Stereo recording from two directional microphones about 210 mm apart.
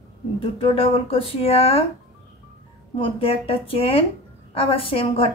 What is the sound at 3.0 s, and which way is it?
Speech, 25° left (ahead or behind).